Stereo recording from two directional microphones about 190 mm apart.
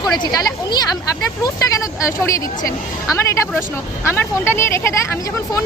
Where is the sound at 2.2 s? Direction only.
15° left (ahead or behind).